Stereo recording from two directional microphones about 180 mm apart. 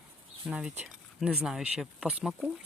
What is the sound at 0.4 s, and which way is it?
Speech, 5° right (ahead or behind).